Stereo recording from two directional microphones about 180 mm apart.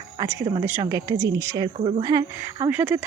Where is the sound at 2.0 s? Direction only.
20° right (ahead or behind).